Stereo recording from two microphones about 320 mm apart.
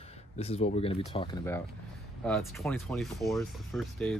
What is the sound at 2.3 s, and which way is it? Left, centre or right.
Speech, centre.